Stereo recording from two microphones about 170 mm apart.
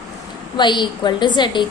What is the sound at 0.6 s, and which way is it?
A woman's voice, 25° left (ahead or behind).